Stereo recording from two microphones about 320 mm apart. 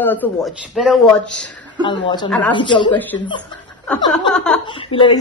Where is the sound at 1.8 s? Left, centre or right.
Centre.